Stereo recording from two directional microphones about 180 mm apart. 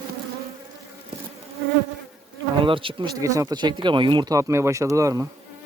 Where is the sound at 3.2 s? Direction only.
15° right (ahead or behind).